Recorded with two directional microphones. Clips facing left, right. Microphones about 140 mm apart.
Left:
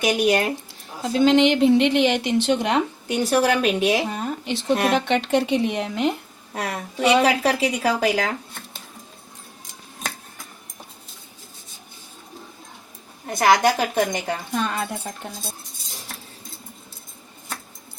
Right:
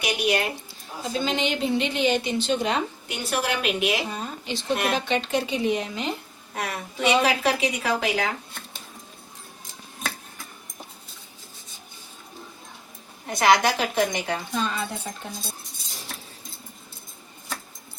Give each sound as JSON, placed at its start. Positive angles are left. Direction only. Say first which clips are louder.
{"t": 0.0, "sound": "a woman's voice", "louder": "left 5 dB", "side_deg": 45}
{"t": 1.0, "sound": "speech", "louder": "left 10 dB", "side_deg": 70}
{"t": 3.1, "sound": "a woman's voice", "louder": "left 9 dB", "side_deg": 35}
{"t": 4.1, "sound": "a sound", "louder": "left 5 dB", "side_deg": 60}
{"t": 4.9, "sound": "speech", "louder": "left 5 dB", "side_deg": 65}
{"t": 6.5, "sound": "a woman's voice", "louder": "left 3 dB", "side_deg": 30}
{"t": 13.4, "sound": "a woman's voice", "louder": "left 2 dB", "side_deg": 50}